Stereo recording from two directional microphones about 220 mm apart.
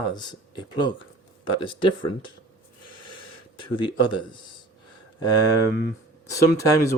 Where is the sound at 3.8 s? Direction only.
20° left (ahead or behind).